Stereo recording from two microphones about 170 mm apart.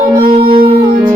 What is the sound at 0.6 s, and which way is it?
Music, 60° right (ahead or behind).